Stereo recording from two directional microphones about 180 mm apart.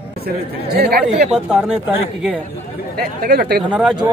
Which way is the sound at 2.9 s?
55° right (ahead or behind).